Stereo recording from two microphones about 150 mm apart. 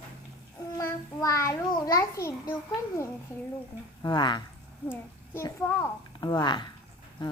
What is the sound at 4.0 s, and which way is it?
Speech, 30° left (ahead or behind).